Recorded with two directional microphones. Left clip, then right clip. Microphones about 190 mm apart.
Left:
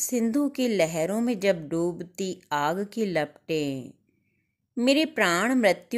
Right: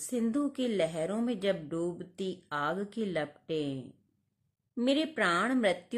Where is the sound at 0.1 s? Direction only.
30° left (ahead or behind).